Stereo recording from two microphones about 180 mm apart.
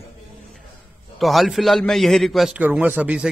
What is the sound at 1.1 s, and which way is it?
Speech, centre (ahead or behind).